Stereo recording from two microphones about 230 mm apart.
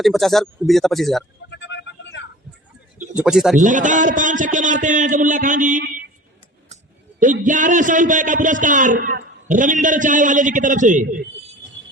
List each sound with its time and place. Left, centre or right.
0.0 s speech: centre
1.5 s vehicle: left
3.2 s speech: centre
3.6 s a man's voice: right
7.2 s a man's voice: right